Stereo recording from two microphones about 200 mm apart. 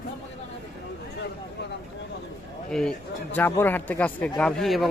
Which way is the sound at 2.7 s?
5° left (ahead or behind).